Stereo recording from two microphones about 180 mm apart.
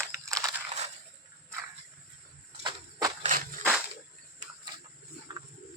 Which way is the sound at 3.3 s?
45° right (ahead or behind).